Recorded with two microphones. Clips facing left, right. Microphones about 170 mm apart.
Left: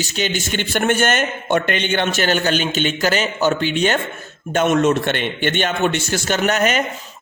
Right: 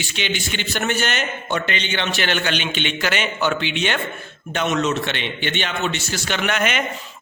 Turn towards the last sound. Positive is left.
turn(degrees=40)  # may be behind; listen again after turning